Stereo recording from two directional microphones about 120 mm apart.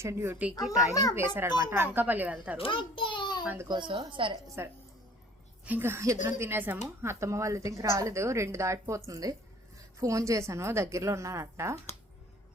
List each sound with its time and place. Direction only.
0.0 s a woman's voice: 20° right (ahead or behind)
0.6 s a child's voice: 5° right (ahead or behind)
1.1 s speech: 20° right (ahead or behind)
2.6 s a child's voice: 45° left (ahead or behind)
3.4 s a child's voice: 15° right (ahead or behind)
3.7 s a woman's voice: 40° right (ahead or behind)
4.4 s a woman's voice: 25° right (ahead or behind)